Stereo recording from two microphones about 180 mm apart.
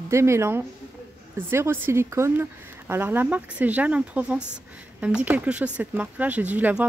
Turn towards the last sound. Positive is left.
turn(degrees=-10)  # may be behind; listen again after turning